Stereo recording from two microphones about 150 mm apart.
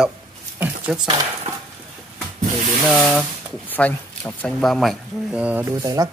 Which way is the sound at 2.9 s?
10° left (ahead or behind).